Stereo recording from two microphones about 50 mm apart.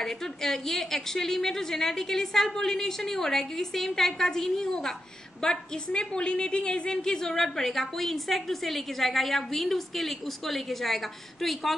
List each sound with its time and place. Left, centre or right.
0.0 s a woman's voice: centre